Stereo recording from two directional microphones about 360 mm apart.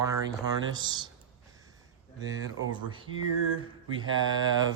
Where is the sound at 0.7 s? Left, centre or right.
Centre.